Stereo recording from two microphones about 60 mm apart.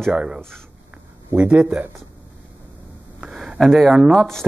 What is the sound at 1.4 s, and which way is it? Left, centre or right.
Speech, right.